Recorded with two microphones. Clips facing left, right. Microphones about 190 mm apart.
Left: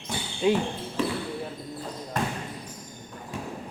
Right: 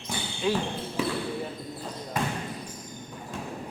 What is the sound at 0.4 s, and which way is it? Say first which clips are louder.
Speech: left 4 dB; 20° left (ahead or behind).